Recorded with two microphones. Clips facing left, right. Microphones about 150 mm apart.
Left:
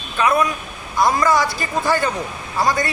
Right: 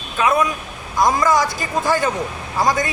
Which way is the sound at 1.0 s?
20° right (ahead or behind).